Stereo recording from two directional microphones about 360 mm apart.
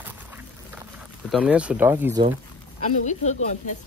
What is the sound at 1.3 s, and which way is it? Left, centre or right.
Speech, centre.